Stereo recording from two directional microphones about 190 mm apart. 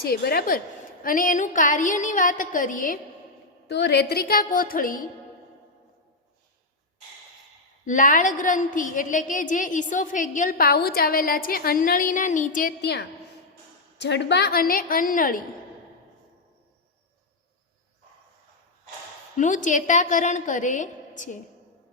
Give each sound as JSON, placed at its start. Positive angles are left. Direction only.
{"t": 0.1, "sound": "a woman's voice", "side_deg": 50}
{"t": 3.7, "sound": "a woman's voice", "side_deg": 65}
{"t": 7.9, "sound": "a woman's voice", "side_deg": 45}
{"t": 12.8, "sound": "a woman's voice", "side_deg": 60}
{"t": 19.4, "sound": "a woman's voice", "side_deg": 40}